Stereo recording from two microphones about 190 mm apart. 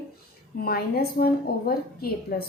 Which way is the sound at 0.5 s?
55° left (ahead or behind).